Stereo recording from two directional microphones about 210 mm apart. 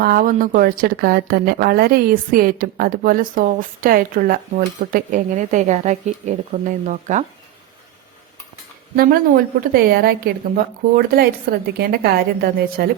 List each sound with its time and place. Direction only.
0.0 s a woman's voice: 45° right (ahead or behind)
9.0 s a woman's voice: 45° right (ahead or behind)